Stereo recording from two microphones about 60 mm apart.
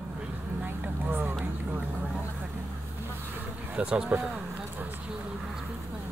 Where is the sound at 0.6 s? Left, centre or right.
Right.